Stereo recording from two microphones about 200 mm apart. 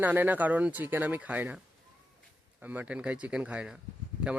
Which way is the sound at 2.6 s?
10° right (ahead or behind).